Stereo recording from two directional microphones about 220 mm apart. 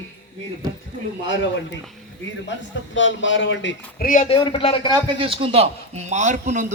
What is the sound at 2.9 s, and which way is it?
Speech, 60° left (ahead or behind).